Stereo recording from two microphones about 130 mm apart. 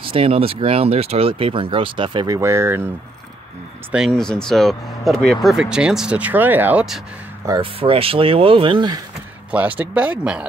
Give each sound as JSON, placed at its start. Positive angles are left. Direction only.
{"t": 0.0, "sound": "speech", "side_deg": -45}
{"t": 4.1, "sound": "speech", "side_deg": 5}
{"t": 7.6, "sound": "speech", "side_deg": -45}
{"t": 9.5, "sound": "speech", "side_deg": -10}